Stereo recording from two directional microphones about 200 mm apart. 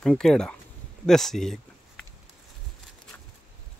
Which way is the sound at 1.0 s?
Centre (ahead or behind).